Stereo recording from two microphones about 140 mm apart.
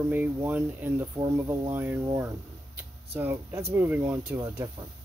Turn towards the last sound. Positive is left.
turn(degrees=-15)  # may be behind; listen again after turning